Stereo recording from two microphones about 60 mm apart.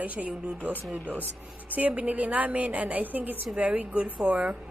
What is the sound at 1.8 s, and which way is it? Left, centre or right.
A woman's voice, right.